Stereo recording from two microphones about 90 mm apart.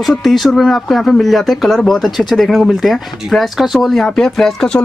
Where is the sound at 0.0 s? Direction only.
Centre (ahead or behind).